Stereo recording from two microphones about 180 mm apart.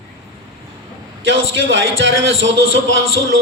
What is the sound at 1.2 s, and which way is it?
Speech, 90° right.